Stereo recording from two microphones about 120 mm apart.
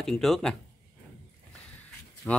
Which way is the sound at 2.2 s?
10° left (ahead or behind).